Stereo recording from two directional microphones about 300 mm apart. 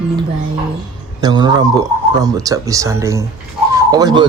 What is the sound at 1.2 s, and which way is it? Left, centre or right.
A man's voice, centre.